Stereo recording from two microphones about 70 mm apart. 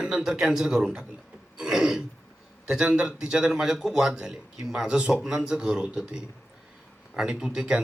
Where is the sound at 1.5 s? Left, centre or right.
Centre.